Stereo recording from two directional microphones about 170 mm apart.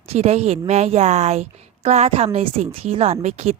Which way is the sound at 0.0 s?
40° right (ahead or behind).